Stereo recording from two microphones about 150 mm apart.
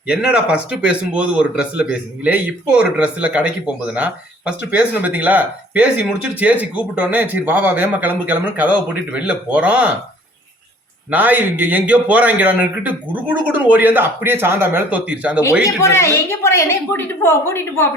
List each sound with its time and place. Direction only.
0.1 s speech: 5° right (ahead or behind)
11.1 s speech: 10° right (ahead or behind)
15.6 s a woman's voice: 20° left (ahead or behind)